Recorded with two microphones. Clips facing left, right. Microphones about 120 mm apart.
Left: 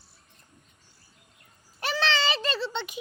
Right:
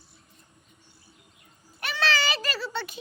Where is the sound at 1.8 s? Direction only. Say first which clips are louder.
Left 1 dB; 25° left (ahead or behind).